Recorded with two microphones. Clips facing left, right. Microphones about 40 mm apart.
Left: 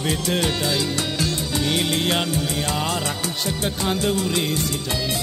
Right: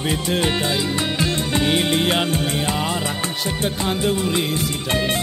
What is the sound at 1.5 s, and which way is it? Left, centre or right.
Music, right.